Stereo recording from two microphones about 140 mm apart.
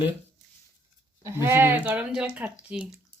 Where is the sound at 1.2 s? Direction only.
20° right (ahead or behind).